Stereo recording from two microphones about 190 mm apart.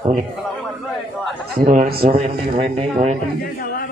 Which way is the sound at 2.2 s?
30° right (ahead or behind).